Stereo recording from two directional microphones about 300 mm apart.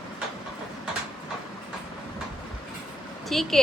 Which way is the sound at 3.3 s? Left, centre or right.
Centre.